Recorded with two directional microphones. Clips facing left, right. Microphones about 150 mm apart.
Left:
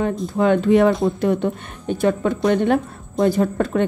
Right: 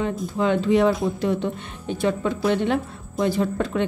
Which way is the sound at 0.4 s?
55° left (ahead or behind).